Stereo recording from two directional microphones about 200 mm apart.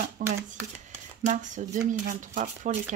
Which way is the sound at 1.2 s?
40° right (ahead or behind).